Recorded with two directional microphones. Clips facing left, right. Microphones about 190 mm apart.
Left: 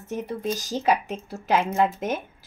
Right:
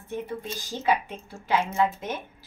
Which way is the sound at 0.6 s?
90° left.